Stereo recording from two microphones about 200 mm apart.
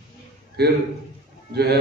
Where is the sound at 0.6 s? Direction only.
55° right (ahead or behind).